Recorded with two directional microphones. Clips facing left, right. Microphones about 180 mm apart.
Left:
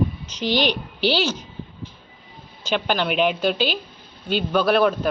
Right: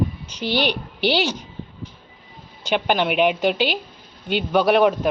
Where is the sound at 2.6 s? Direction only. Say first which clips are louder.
Right 2 dB; 15° right (ahead or behind).